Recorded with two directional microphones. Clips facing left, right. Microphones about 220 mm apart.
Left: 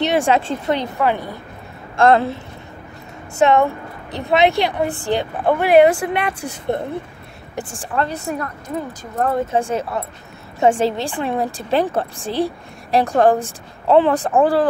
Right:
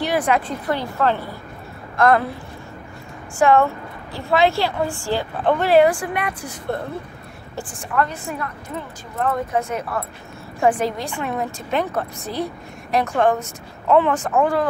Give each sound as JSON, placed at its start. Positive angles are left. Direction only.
{"t": 0.0, "sound": "a woman's voice", "side_deg": 25}
{"t": 2.0, "sound": "a woman's voice", "side_deg": 25}
{"t": 3.3, "sound": "a woman's voice", "side_deg": 20}